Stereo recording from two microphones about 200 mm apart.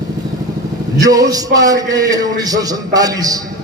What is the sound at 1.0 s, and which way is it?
A man's voice, 20° right (ahead or behind).